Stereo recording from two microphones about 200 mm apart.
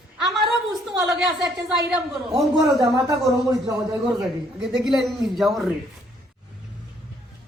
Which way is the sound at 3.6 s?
20° right (ahead or behind).